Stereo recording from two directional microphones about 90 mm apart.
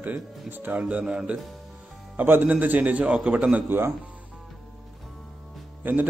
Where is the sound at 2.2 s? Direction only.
20° right (ahead or behind).